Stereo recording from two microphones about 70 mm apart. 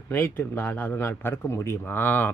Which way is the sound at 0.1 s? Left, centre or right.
Left.